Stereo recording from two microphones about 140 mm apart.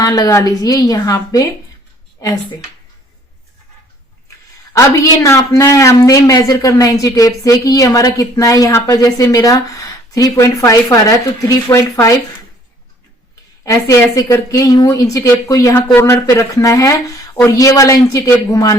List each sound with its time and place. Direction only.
0.0 s a man's voice: 25° left (ahead or behind)
4.7 s a man's voice: 20° left (ahead or behind)
13.7 s a man's voice: 25° left (ahead or behind)